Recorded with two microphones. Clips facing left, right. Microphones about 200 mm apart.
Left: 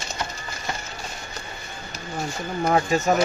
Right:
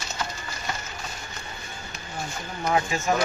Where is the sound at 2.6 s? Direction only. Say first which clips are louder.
Left 4 dB; 40° left (ahead or behind).